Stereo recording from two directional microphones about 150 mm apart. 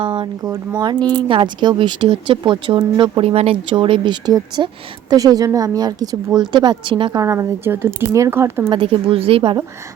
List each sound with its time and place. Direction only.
0.0 s speech: 35° right (ahead or behind); by 8.6 s 15° right (ahead or behind)
8.7 s speech: 35° right (ahead or behind)